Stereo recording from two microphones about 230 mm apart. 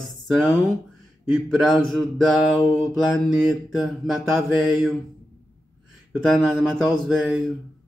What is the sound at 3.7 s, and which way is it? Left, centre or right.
Speech, centre.